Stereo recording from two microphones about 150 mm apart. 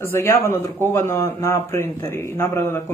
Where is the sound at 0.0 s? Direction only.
15° left (ahead or behind).